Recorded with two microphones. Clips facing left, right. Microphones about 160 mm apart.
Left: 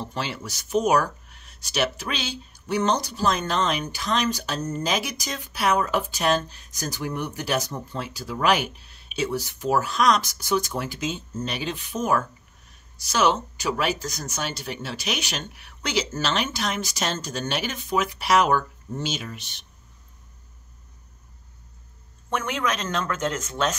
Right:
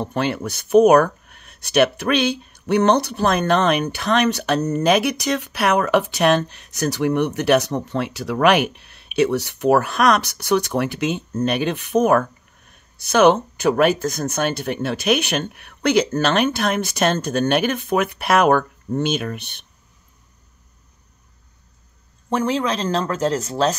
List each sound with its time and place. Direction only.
0.0 s speech: 55° right (ahead or behind)
22.3 s speech: 30° right (ahead or behind)